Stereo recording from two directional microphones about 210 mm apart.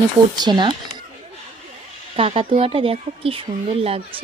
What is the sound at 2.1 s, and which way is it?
Speech, 25° right (ahead or behind).